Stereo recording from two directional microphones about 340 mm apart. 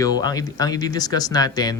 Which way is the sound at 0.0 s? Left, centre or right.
Centre.